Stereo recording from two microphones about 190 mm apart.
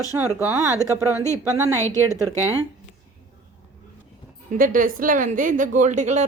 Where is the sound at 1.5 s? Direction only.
15° right (ahead or behind).